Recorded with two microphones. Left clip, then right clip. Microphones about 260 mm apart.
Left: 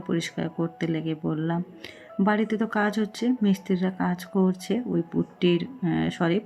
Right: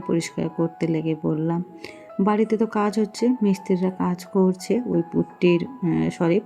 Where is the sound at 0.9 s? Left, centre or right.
Left.